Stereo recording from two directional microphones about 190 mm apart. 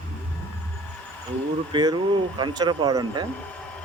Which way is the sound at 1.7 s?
25° right (ahead or behind).